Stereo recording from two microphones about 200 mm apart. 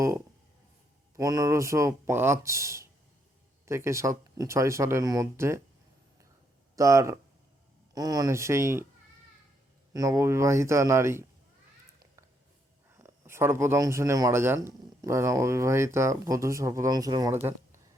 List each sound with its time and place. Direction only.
1.1 s speech: 15° right (ahead or behind)
6.7 s speech: 15° right (ahead or behind)
9.9 s speech: 15° right (ahead or behind)
13.0 s speech: 10° right (ahead or behind)